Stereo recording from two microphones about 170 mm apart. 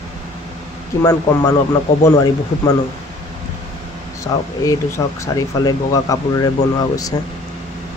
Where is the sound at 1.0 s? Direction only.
15° left (ahead or behind).